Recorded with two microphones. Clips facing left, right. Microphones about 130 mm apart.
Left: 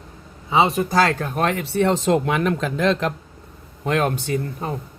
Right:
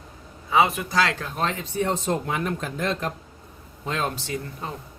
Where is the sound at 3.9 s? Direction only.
60° left (ahead or behind).